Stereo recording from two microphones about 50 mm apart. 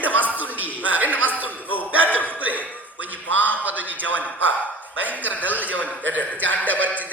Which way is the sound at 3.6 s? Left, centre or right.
Right.